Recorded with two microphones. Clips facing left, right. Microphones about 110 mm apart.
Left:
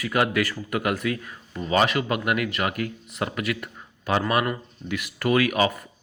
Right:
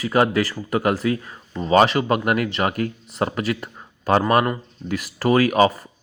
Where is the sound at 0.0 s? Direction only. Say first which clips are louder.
Right 4 dB; 30° right (ahead or behind).